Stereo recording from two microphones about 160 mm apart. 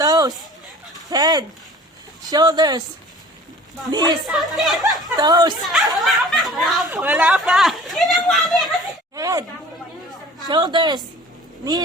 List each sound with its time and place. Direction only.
0.0 s fowl: 25° right (ahead or behind)
1.1 s speech: 25° right (ahead or behind)
3.9 s speech: 25° right (ahead or behind)
4.3 s speech: centre (ahead or behind)
5.1 s speech: 25° right (ahead or behind)
5.6 s speech: centre (ahead or behind)
9.1 s a sound: 20° right (ahead or behind)
10.5 s speech: 30° right (ahead or behind)